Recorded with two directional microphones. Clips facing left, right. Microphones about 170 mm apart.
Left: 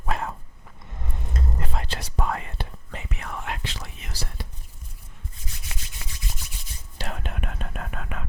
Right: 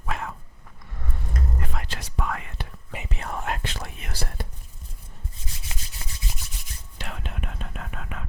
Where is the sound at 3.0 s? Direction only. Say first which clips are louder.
Right 3 dB; 30° right (ahead or behind); by 4.4 s 55° right (ahead or behind).